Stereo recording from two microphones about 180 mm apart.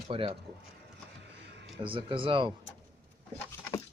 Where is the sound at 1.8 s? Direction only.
30° right (ahead or behind).